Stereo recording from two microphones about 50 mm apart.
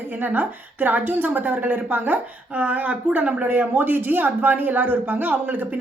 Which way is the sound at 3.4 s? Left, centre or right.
Right.